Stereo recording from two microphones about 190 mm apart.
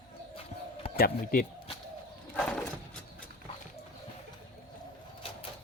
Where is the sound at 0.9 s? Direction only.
50° left (ahead or behind).